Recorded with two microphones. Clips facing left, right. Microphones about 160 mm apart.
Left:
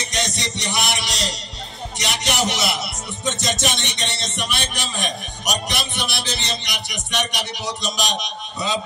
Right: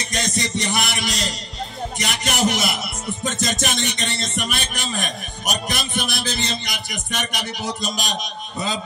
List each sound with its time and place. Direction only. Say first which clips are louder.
0.1 s music: right 4 dB; 50° right (ahead or behind)